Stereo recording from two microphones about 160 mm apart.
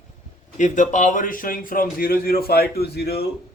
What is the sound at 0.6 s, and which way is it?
A man's voice, 50° left (ahead or behind).